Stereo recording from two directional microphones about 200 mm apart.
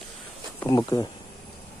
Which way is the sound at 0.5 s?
20° left (ahead or behind).